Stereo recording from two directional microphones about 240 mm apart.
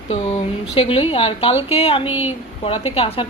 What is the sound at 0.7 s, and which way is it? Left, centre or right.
A woman's voice, left.